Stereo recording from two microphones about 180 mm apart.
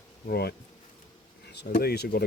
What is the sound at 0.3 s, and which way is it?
Speech, 65° left (ahead or behind).